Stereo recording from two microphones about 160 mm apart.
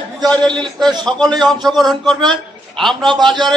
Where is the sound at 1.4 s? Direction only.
Centre (ahead or behind).